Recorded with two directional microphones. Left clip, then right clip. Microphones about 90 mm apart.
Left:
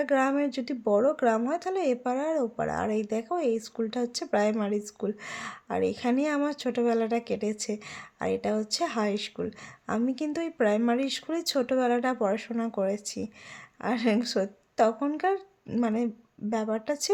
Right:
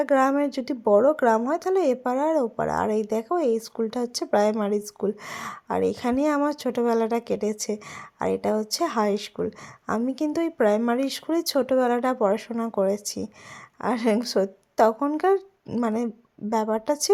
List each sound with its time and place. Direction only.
0.0 s a woman's voice: 40° right (ahead or behind)